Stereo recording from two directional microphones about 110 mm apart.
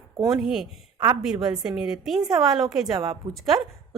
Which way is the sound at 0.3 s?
5° right (ahead or behind).